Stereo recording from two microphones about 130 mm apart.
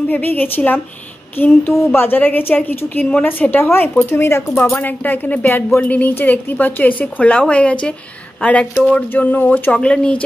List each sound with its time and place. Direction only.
0.1 s a woman's voice: 15° left (ahead or behind)